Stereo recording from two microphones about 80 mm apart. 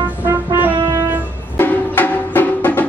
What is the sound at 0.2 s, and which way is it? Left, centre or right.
Music, right.